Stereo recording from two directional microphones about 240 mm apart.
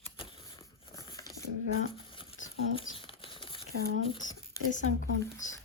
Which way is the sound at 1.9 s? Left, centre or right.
Left.